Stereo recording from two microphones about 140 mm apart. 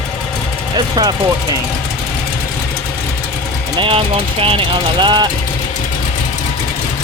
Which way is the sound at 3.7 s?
40° right (ahead or behind).